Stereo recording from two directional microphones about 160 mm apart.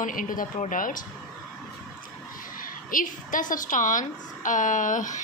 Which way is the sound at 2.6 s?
60° left (ahead or behind).